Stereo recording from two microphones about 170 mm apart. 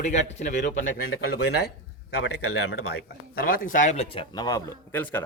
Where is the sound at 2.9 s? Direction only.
60° left (ahead or behind).